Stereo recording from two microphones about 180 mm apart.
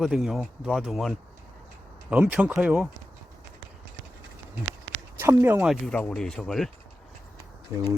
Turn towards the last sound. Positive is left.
turn(degrees=-15)  # may be behind; listen again after turning